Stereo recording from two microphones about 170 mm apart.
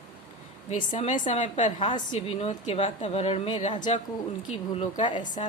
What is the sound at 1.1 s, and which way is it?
Speech, 45° left (ahead or behind).